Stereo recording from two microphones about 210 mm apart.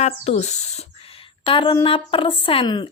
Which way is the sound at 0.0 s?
30° left (ahead or behind).